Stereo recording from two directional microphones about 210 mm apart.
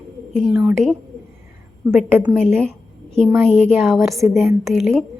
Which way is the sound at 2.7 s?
30° right (ahead or behind).